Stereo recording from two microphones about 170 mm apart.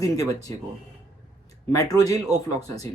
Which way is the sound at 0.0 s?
20° left (ahead or behind).